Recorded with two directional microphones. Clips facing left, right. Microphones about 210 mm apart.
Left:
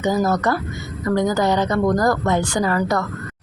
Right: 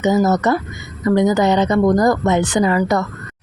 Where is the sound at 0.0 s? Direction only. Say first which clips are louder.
Right 4 dB; 20° right (ahead or behind).